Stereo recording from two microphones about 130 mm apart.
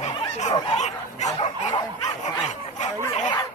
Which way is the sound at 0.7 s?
60° left (ahead or behind).